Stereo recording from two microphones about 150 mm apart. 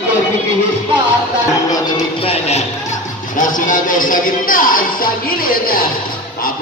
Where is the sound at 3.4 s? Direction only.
60° left (ahead or behind).